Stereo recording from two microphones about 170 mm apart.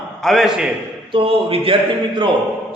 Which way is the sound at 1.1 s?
35° right (ahead or behind).